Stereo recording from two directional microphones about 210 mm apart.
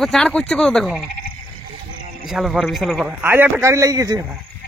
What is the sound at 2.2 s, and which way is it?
Speech, centre (ahead or behind).